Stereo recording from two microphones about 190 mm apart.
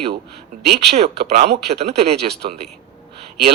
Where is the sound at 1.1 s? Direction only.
60° right (ahead or behind).